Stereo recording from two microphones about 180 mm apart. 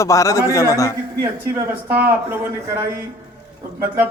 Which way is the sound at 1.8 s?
10° right (ahead or behind).